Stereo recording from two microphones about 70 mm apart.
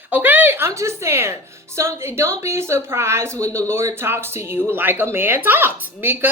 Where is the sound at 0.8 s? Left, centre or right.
Right.